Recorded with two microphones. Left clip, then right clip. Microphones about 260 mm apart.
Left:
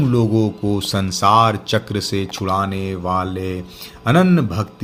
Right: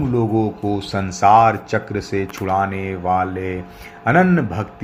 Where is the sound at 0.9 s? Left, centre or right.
Left.